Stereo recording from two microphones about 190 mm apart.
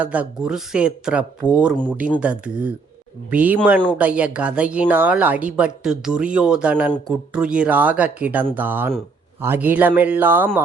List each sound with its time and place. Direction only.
0.0 s speech: 5° right (ahead or behind)